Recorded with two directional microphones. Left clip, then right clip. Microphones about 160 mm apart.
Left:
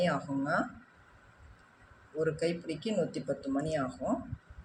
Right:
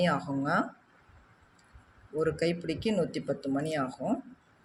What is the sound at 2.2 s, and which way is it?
Speech, 45° right (ahead or behind).